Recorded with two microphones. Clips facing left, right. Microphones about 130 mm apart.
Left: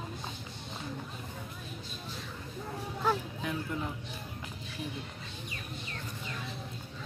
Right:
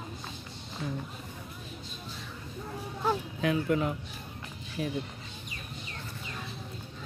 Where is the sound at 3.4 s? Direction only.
80° right.